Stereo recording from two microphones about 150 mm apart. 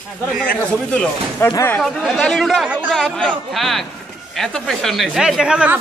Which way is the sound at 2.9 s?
5° left (ahead or behind).